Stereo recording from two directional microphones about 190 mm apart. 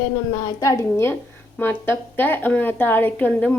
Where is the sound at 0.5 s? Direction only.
15° left (ahead or behind).